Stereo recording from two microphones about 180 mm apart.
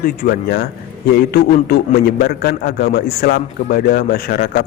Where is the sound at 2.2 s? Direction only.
55° left (ahead or behind).